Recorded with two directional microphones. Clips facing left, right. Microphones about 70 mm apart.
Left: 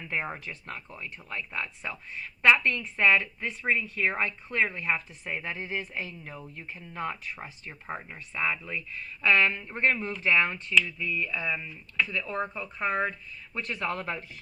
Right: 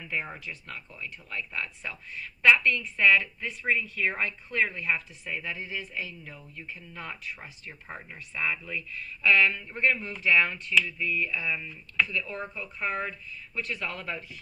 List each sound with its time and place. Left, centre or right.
0.2 s speech: left
7.3 s speech: centre
8.4 s speech: left
12.0 s speech: left